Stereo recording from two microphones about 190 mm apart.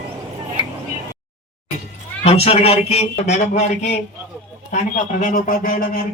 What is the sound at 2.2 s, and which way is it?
A man's voice, 30° left (ahead or behind).